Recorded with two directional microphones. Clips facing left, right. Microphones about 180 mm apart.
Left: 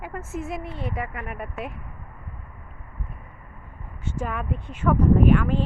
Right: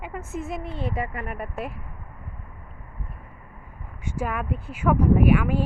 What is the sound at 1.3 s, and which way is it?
Speech, centre (ahead or behind).